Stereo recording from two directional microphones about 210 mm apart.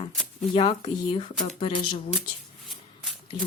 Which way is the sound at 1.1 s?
25° left (ahead or behind).